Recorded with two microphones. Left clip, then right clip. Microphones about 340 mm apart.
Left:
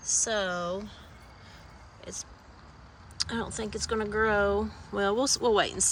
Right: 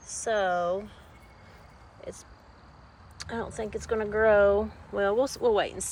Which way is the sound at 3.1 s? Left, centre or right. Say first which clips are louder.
Left 1 dB; centre.